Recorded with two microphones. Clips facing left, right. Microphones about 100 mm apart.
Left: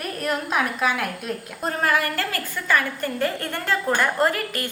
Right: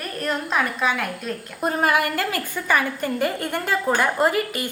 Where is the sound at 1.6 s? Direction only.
15° right (ahead or behind).